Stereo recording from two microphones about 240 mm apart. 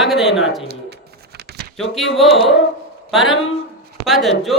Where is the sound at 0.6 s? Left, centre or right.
Right.